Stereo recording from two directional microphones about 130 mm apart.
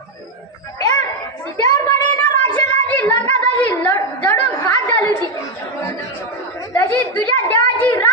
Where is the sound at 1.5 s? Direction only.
30° left (ahead or behind).